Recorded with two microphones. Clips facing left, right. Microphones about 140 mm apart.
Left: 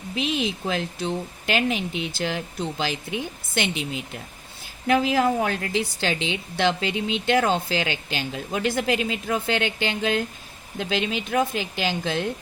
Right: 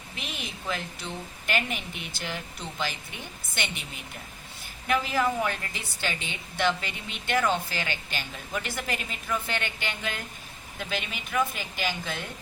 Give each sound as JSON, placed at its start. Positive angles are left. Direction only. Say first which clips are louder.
{"t": 0.7, "sound": "a woman's voice", "louder": "left 7 dB", "side_deg": 90}
{"t": 5.2, "sound": "a woman's voice", "louder": "left 5 dB", "side_deg": 65}